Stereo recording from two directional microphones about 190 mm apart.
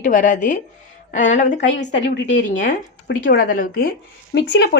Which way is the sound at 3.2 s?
45° left (ahead or behind).